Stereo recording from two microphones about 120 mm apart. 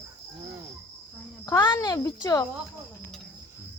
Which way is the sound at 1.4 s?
30° left (ahead or behind).